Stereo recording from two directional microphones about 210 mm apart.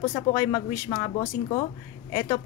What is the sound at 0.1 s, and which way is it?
A woman's voice, 15° left (ahead or behind).